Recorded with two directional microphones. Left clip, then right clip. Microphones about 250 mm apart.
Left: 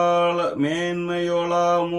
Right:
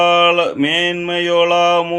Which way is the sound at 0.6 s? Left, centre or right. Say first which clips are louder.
Right 7 dB; centre.